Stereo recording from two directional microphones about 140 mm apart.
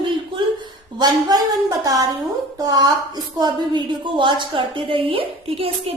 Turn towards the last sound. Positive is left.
turn(degrees=-45)  # may be behind; listen again after turning